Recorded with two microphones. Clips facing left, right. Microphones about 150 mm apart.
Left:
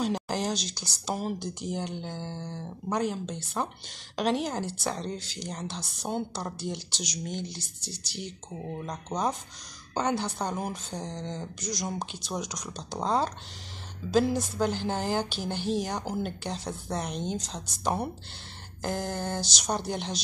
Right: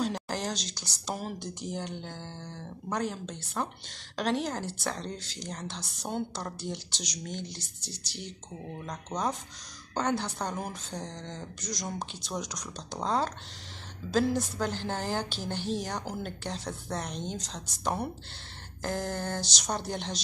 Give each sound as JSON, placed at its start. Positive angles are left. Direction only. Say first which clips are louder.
{"t": 0.0, "sound": "a sound", "louder": "left 2 dB", "side_deg": 20}
{"t": 0.4, "sound": "a woman's voice", "louder": "left 4 dB", "side_deg": 10}
{"t": 8.7, "sound": "a woman's voice", "louder": "left 2 dB", "side_deg": 15}